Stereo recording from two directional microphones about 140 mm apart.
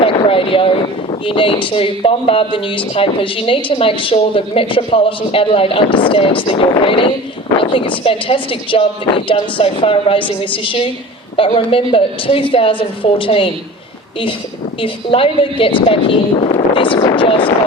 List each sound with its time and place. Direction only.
0.0 s a sound: 40° left (ahead or behind)
1.2 s speech: 40° left (ahead or behind)
14.8 s speech: 40° left (ahead or behind)